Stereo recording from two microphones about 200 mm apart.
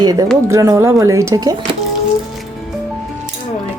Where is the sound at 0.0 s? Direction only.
20° right (ahead or behind).